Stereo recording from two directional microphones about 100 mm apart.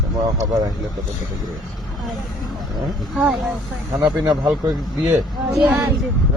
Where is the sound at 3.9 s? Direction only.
40° right (ahead or behind).